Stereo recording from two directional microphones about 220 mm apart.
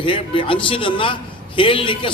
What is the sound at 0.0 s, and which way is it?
A man's voice, 25° left (ahead or behind).